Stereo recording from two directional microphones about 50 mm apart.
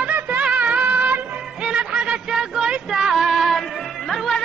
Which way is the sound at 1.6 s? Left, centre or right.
Centre.